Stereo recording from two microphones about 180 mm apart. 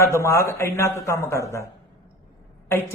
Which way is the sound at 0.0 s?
15° left (ahead or behind).